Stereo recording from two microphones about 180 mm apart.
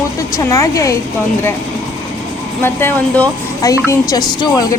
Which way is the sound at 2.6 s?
10° left (ahead or behind).